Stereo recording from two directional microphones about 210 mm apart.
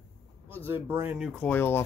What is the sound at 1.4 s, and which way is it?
Speech, 10° left (ahead or behind).